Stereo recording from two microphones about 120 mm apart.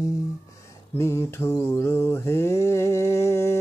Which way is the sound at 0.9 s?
20° left (ahead or behind).